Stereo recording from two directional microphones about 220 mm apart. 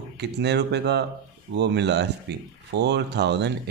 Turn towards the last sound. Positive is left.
turn(degrees=-50)  # may be behind; listen again after turning